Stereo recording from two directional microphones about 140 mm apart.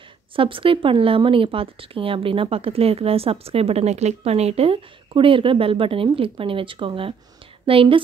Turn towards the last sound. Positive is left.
turn(degrees=-40)  # may be behind; listen again after turning